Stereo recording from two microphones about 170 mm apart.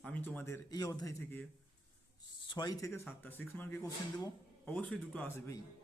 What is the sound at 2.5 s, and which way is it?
Speech, 25° left (ahead or behind).